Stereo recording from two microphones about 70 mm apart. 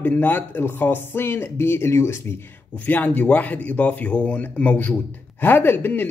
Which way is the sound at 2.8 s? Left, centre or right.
Left.